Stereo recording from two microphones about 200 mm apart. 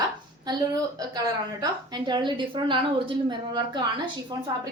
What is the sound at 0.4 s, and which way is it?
A woman's voice, 20° right (ahead or behind).